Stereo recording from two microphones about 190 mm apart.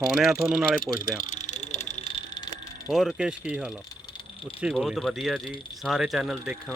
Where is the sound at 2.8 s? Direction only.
Centre (ahead or behind).